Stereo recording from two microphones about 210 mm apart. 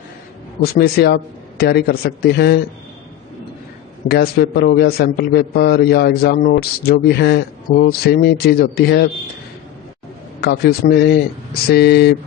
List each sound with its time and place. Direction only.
0.7 s a man's voice: 50° left (ahead or behind)
4.1 s a man's voice: 50° left (ahead or behind)
10.4 s a man's voice: 45° left (ahead or behind)